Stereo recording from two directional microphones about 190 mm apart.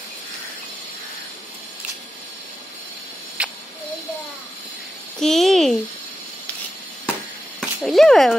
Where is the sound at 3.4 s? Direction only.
5° right (ahead or behind).